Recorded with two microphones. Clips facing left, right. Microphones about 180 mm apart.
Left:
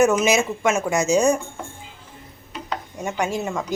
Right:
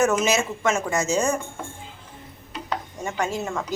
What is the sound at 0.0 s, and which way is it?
Speech, 10° left (ahead or behind).